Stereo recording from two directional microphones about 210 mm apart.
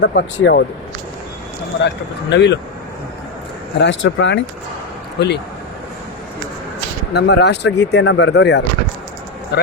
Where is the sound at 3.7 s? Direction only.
60° left (ahead or behind).